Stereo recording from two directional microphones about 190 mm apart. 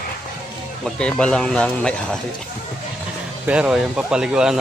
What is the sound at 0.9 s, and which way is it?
Speech, 5° left (ahead or behind).